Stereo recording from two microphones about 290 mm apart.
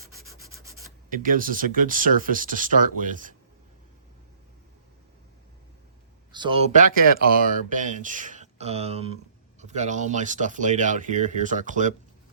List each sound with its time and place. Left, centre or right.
0.6 s rub: centre
1.1 s speech: right
6.3 s speech: centre